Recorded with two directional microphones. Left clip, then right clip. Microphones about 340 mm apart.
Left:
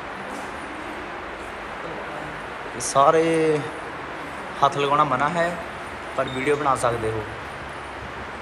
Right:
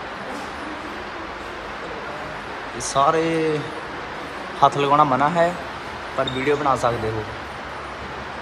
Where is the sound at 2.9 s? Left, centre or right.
Centre.